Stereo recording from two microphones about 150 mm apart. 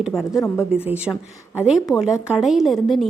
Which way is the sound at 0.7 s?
10° right (ahead or behind).